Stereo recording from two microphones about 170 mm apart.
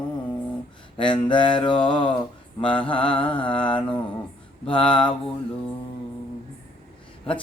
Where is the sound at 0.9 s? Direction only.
30° left (ahead or behind).